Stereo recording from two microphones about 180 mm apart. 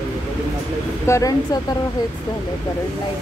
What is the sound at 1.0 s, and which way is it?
Speech, 15° left (ahead or behind).